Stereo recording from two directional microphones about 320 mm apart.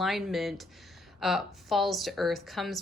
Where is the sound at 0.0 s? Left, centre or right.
Centre.